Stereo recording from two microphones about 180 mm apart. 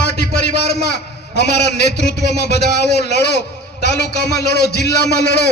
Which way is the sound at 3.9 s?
65° left (ahead or behind).